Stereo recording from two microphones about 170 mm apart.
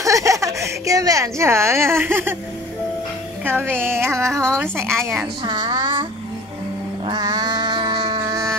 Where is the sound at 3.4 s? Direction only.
10° right (ahead or behind).